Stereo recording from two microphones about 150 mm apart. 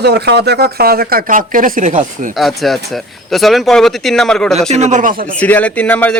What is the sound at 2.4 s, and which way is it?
Speech, centre (ahead or behind).